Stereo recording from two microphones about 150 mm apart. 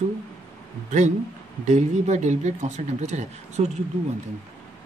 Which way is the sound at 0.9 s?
50° right (ahead or behind).